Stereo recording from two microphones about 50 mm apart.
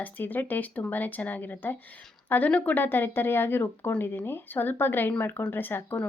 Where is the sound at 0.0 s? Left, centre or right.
Left.